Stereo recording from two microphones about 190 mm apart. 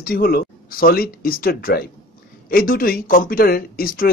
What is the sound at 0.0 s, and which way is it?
Speech, 50° left (ahead or behind).